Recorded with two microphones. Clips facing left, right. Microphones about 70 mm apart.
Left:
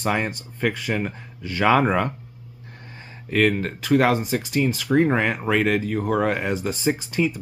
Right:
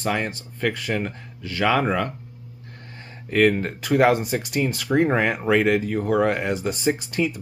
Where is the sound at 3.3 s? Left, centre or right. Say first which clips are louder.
Right 2 dB; centre.